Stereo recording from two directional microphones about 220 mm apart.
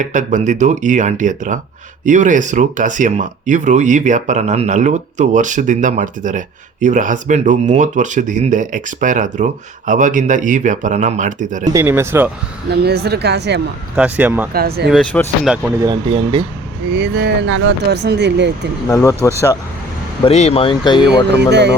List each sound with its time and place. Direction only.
0.0 s speech: 35° right (ahead or behind)
11.7 s speech: 10° right (ahead or behind)
12.7 s speech: 45° right (ahead or behind)
13.9 s speech: 5° right (ahead or behind)
14.5 s speech: 45° right (ahead or behind)
14.8 s speech: 5° left (ahead or behind)
15.8 s speech: 20° right (ahead or behind)
16.9 s speech: 50° right (ahead or behind)
18.9 s speech: 15° left (ahead or behind)
20.2 s speech: 30° left (ahead or behind)
21.5 s speech: 50° right (ahead or behind)